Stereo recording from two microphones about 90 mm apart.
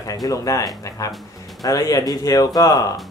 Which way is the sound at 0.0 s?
45° left (ahead or behind).